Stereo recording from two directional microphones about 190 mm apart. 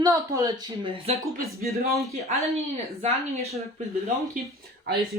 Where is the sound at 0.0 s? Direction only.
20° right (ahead or behind).